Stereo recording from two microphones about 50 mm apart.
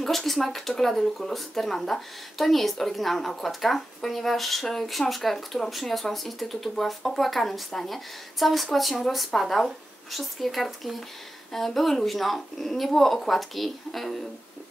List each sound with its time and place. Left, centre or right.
0.0 s speech: centre